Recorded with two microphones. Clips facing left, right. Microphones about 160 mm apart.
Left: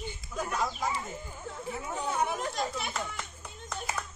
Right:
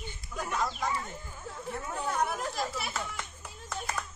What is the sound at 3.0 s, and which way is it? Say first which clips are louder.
Clapping: left 1 dB; 5° left (ahead or behind).